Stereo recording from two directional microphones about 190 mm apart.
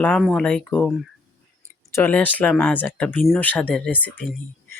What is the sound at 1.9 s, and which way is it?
Speech, 10° left (ahead or behind).